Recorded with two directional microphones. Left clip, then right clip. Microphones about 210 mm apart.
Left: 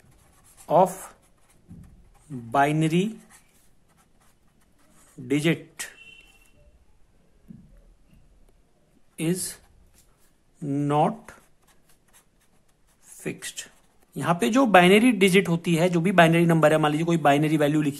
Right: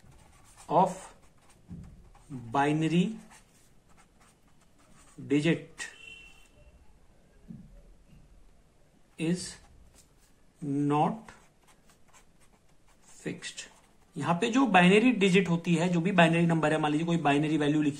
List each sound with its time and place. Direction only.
0.7 s speech: 45° left (ahead or behind)
2.5 s speech: 45° left (ahead or behind)
5.3 s speech: 45° left (ahead or behind)
9.1 s speech: 45° left (ahead or behind)
10.7 s speech: 45° left (ahead or behind)
13.1 s speech: 45° left (ahead or behind)